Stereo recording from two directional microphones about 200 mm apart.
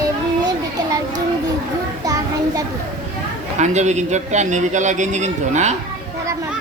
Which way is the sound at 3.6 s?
35° right (ahead or behind).